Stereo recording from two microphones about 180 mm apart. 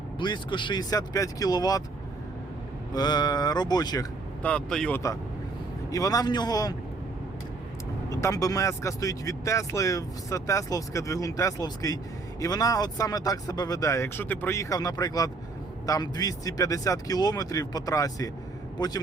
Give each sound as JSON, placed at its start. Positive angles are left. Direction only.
{"t": 0.2, "sound": "speech", "side_deg": 25}
{"t": 2.9, "sound": "speech", "side_deg": 20}
{"t": 4.4, "sound": "speech", "side_deg": 5}
{"t": 5.9, "sound": "speech", "side_deg": 20}
{"t": 8.1, "sound": "speech", "side_deg": 20}